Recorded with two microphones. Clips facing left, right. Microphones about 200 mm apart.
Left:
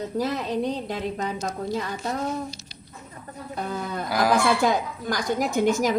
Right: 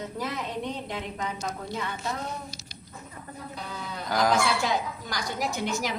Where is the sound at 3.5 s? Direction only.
50° left (ahead or behind).